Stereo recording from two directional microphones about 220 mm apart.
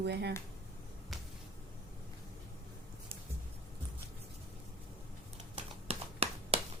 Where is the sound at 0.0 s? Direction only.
50° right (ahead or behind).